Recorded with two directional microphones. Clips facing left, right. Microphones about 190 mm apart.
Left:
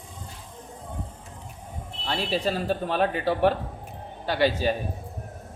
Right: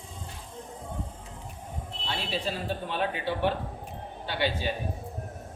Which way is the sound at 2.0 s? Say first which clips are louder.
Left 6 dB; 40° left (ahead or behind).